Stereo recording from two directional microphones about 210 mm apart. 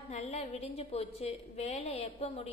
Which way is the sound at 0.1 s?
30° left (ahead or behind).